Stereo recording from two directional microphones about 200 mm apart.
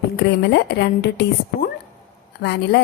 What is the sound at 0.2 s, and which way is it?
A woman's voice, 55° left (ahead or behind).